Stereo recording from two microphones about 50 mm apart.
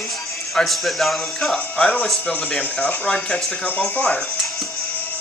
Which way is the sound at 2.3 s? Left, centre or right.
Left.